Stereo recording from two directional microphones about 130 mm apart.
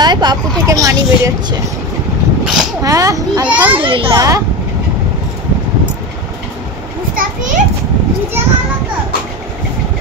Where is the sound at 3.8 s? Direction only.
40° right (ahead or behind).